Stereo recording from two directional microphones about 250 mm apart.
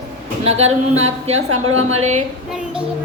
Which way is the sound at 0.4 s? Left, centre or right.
Right.